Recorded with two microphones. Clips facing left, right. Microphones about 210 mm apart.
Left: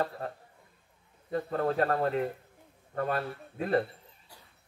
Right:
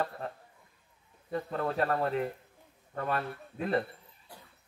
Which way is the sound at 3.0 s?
40° left (ahead or behind).